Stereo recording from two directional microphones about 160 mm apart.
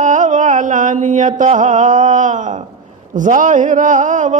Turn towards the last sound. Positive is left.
turn(degrees=-55)  # may be behind; listen again after turning